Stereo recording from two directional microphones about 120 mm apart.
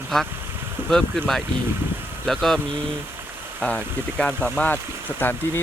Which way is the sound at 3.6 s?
10° left (ahead or behind).